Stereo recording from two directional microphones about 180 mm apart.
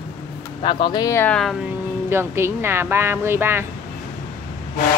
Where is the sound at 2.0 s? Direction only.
15° right (ahead or behind).